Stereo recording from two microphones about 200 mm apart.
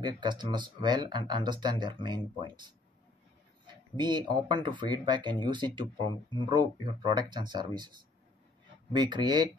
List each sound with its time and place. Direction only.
0.0 s speech: 20° right (ahead or behind)
3.9 s speech: 20° right (ahead or behind)
8.9 s speech: 20° right (ahead or behind)